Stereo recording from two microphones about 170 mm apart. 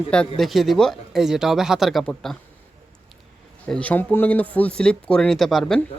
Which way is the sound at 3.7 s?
10° left (ahead or behind).